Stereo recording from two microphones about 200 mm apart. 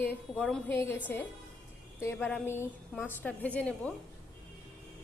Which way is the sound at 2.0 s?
10° left (ahead or behind).